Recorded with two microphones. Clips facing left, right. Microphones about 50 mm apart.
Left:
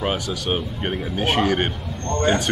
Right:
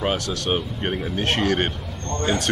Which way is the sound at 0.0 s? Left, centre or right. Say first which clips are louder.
Even; centre.